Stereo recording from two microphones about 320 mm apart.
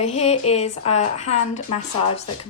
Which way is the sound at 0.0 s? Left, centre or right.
Left.